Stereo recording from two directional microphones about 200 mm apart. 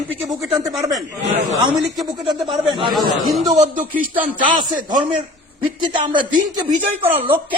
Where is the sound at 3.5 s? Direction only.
40° right (ahead or behind).